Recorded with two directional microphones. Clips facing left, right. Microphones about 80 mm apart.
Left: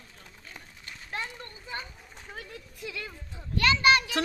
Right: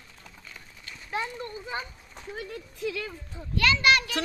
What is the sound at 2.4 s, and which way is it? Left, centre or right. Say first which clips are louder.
Speech: right 7 dB; centre.